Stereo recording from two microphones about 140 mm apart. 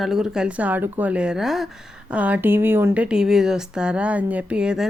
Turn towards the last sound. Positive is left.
turn(degrees=-5)  # may be behind; listen again after turning